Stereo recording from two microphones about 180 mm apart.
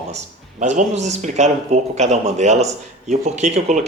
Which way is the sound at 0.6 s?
40° right (ahead or behind).